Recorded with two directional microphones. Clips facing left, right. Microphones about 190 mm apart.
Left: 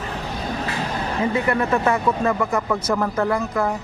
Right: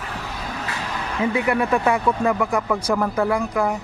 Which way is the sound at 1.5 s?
10° right (ahead or behind).